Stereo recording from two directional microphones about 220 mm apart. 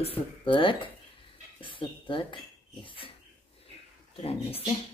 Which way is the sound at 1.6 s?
20° left (ahead or behind).